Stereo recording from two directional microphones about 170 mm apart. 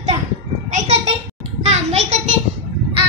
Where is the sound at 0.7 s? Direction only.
45° right (ahead or behind).